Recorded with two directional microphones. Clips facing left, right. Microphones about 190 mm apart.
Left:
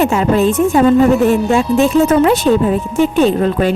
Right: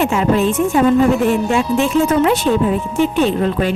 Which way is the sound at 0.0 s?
40° left (ahead or behind).